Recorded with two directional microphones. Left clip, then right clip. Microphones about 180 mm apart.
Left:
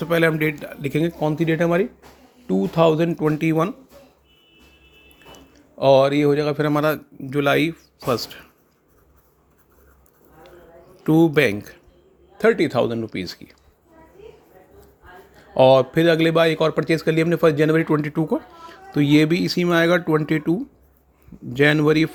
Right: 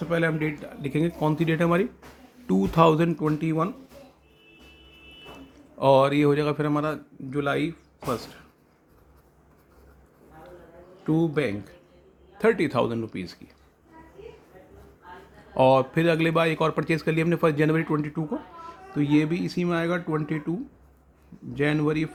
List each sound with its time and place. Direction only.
0.0 s a man's voice: 50° left (ahead or behind)
0.9 s speech: 30° left (ahead or behind)
1.2 s speech: 15° left (ahead or behind)
2.5 s speech: centre (ahead or behind)
3.2 s speech: 35° left (ahead or behind)
5.5 s a man's voice: 15° left (ahead or behind)
6.6 s speech: 30° left (ahead or behind)
11.0 s a man's voice: 45° left (ahead or behind)
12.4 s speech: 20° left (ahead or behind)
13.1 s speech: 30° left (ahead or behind)
15.5 s speech: 20° left (ahead or behind); by 22.1 s 40° left (ahead or behind)